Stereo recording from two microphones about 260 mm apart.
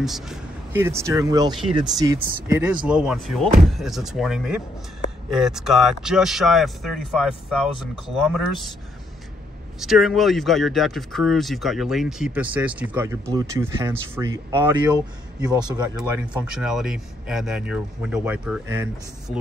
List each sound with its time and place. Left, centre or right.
0.0 s speech: centre
2.6 s speech: centre
9.8 s speech: centre
16.0 s speech: centre